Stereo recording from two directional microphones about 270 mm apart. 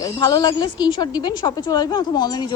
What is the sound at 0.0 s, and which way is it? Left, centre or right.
A woman's voice, centre.